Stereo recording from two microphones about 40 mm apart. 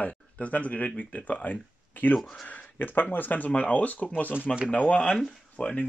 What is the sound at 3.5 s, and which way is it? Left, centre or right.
Speech, left.